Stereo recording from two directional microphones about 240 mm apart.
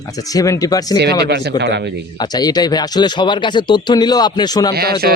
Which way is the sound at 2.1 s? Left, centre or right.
Centre.